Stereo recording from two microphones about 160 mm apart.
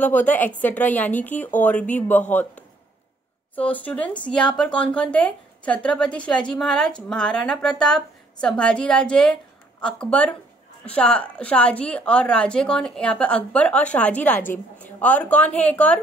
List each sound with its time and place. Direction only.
0.0 s a woman's voice: 10° left (ahead or behind)